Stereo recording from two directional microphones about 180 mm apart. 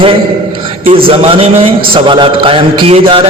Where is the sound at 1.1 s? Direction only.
30° right (ahead or behind).